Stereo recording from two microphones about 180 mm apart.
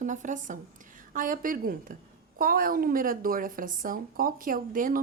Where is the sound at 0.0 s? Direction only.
45° right (ahead or behind).